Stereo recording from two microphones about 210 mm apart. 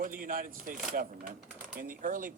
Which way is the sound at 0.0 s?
40° right (ahead or behind).